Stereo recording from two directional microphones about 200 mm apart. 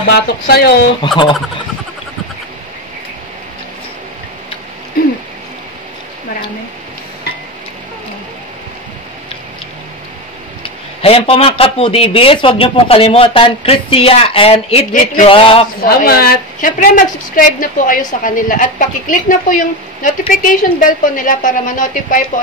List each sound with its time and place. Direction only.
0.1 s a woman's voice: 55° left (ahead or behind)
1.0 s speech: 25° left (ahead or behind)
10.6 s speech: 30° left (ahead or behind)
15.2 s speech: 25° left (ahead or behind)
15.8 s a woman's voice: 50° left (ahead or behind)